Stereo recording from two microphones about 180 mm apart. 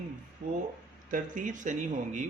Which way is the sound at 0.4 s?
50° right (ahead or behind).